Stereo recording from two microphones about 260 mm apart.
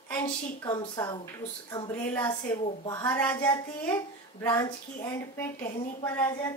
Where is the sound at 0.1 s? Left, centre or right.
Centre.